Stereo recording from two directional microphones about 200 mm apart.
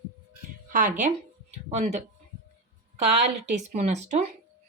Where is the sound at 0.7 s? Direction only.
40° right (ahead or behind).